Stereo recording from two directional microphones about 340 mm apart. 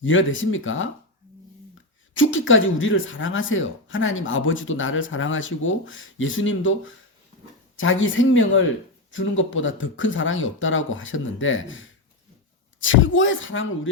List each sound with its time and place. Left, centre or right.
0.0 s speech: left
2.1 s speech: left